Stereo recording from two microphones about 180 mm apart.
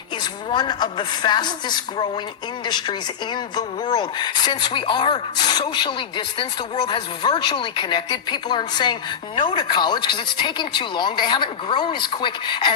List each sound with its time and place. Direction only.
0.5 s speech: 25° left (ahead or behind)